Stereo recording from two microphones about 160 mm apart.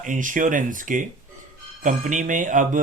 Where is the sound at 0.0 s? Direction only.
55° right (ahead or behind).